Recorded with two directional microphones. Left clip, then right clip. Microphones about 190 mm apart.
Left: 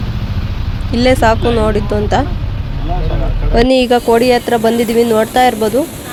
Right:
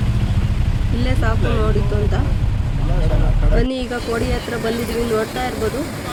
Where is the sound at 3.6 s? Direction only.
40° left (ahead or behind).